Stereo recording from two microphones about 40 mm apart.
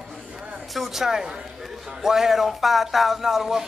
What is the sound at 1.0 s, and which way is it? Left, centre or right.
Speech, centre.